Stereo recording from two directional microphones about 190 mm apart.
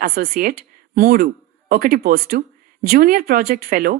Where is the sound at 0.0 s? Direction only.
50° right (ahead or behind).